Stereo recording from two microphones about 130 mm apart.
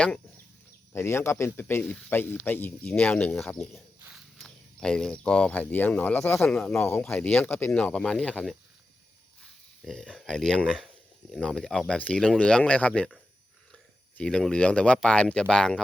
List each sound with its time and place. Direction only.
0.9 s speech: 20° left (ahead or behind)
3.4 s speech: centre (ahead or behind)
9.8 s speech: 5° left (ahead or behind)
14.2 s speech: 5° left (ahead or behind)